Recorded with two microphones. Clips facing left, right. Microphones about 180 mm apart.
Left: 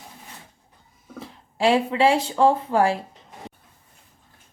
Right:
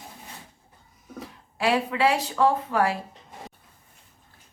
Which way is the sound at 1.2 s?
25° left (ahead or behind).